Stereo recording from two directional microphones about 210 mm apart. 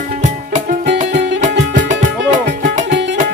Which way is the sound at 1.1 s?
55° right (ahead or behind).